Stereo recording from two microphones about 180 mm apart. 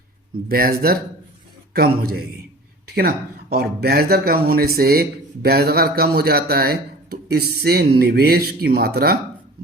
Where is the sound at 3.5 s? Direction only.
60° right (ahead or behind).